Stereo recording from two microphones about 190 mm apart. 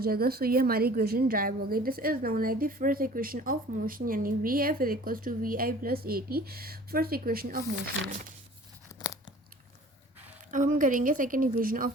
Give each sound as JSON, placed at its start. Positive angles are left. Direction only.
{"t": 0.0, "sound": "a woman's voice", "side_deg": -55}
{"t": 10.5, "sound": "a woman's voice", "side_deg": -45}